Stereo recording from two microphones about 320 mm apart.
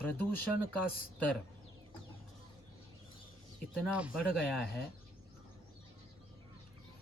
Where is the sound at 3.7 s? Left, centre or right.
Centre.